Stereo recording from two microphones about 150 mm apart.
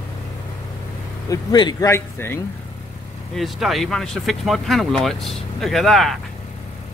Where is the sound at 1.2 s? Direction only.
25° left (ahead or behind).